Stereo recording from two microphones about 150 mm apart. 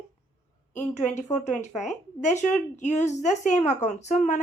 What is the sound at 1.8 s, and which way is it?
Speech, 50° left (ahead or behind).